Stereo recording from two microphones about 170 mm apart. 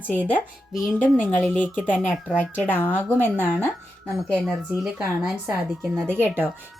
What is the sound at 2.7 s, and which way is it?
A woman's voice, 10° left (ahead or behind).